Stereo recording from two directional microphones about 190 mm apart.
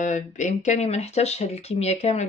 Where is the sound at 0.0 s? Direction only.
40° left (ahead or behind).